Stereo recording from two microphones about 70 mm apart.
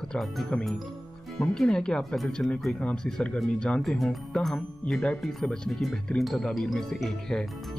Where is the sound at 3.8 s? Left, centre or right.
Centre.